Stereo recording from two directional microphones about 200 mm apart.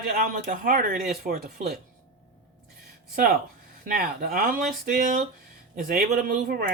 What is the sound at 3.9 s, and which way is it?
Speech, 50° right (ahead or behind).